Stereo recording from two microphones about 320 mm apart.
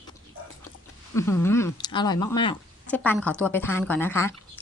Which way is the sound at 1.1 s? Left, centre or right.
Centre.